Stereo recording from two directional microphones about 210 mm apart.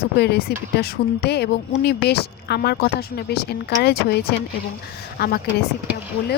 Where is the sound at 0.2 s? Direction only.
50° left (ahead or behind).